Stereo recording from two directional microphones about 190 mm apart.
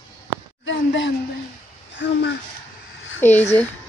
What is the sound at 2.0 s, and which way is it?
Speech, 70° left (ahead or behind).